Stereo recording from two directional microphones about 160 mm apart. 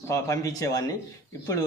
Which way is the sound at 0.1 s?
20° left (ahead or behind).